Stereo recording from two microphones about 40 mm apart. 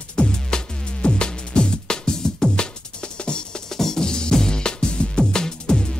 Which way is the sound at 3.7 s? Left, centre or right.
Centre.